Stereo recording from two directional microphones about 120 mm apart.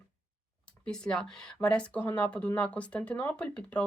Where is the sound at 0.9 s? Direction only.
5° left (ahead or behind).